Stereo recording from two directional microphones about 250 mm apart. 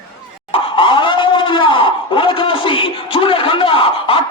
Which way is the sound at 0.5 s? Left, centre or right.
Left.